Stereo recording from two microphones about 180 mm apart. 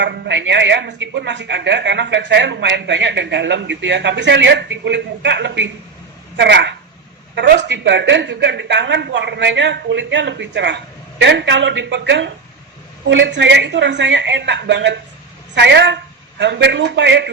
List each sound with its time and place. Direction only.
0.0 s a woman's voice: 75° right (ahead or behind)